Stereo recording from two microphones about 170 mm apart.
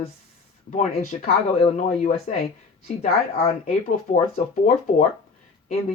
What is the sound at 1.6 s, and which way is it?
Speech, 35° left (ahead or behind).